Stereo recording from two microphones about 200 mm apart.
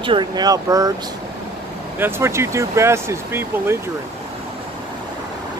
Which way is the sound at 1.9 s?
10° right (ahead or behind).